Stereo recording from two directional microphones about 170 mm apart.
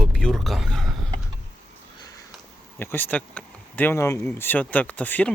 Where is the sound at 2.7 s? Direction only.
10° left (ahead or behind).